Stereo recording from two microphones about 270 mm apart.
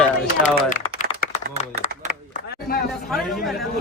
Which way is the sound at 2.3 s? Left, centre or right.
Left.